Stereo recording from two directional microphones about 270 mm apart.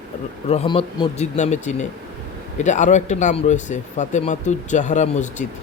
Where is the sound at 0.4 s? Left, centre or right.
Left.